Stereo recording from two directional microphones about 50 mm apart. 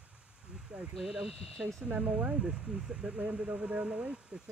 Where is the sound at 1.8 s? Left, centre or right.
Right.